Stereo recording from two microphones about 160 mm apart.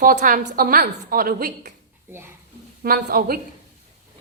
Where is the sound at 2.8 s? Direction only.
70° right (ahead or behind).